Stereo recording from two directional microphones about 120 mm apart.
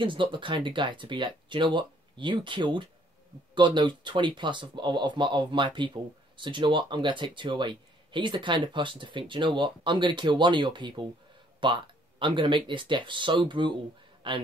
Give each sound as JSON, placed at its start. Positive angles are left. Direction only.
{"t": 0.0, "sound": "a man's voice", "side_deg": -45}